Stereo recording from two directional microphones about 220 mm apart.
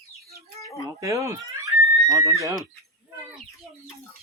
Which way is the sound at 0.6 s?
15° left (ahead or behind).